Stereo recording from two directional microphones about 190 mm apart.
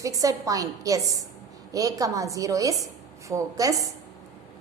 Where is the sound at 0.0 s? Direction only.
20° right (ahead or behind).